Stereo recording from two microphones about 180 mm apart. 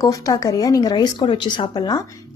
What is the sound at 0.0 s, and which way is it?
A woman's voice, 20° left (ahead or behind).